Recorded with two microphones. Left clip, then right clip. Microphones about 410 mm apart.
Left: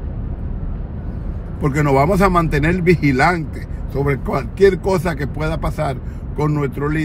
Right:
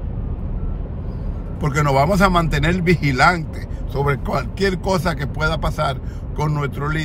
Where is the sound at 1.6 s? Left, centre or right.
Right.